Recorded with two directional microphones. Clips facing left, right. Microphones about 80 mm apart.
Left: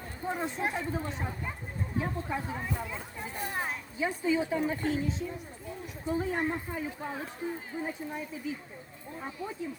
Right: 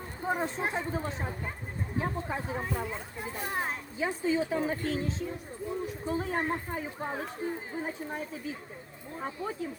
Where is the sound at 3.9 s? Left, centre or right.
Right.